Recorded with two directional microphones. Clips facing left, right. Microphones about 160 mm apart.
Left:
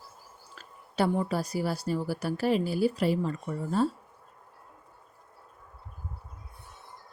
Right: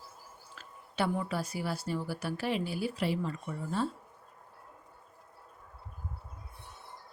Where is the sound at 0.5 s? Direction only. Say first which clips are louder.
Left 5 dB; 40° left (ahead or behind).